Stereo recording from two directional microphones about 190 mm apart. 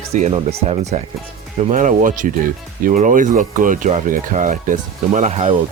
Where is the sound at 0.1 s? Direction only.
35° right (ahead or behind).